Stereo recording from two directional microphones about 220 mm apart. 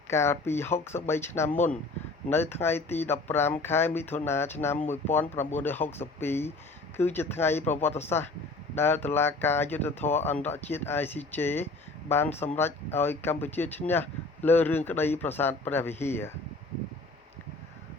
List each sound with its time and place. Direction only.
0.1 s speech: 10° left (ahead or behind)
1.5 s speech: 35° left (ahead or behind)
2.3 s speech: 10° left (ahead or behind)
10.0 s speech: 30° left (ahead or behind)
10.2 s speech: 10° left (ahead or behind)